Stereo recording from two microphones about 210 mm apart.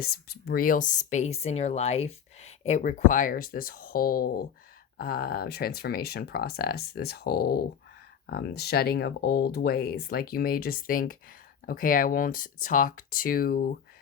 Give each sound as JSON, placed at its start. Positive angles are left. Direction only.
{"t": 0.0, "sound": "speech", "side_deg": 50}